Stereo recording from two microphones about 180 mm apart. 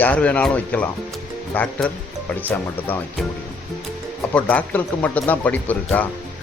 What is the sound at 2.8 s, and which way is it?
Speech, 10° left (ahead or behind).